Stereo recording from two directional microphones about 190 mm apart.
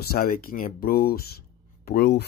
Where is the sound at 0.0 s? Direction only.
50° left (ahead or behind).